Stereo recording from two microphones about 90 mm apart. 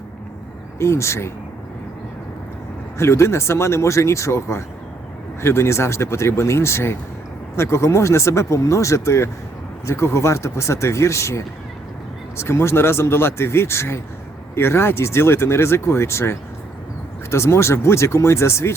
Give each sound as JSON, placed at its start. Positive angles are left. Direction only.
{"t": 0.8, "sound": "speech", "side_deg": 30}
{"t": 3.0, "sound": "speech", "side_deg": 30}